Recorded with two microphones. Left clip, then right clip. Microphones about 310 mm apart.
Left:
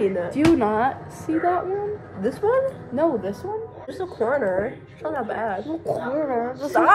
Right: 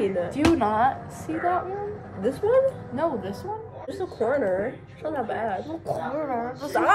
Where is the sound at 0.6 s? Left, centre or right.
Centre.